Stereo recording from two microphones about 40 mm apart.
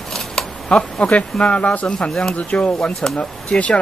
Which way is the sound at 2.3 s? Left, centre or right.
Left.